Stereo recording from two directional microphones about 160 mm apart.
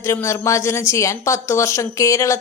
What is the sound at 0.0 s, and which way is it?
A woman's voice, 15° left (ahead or behind).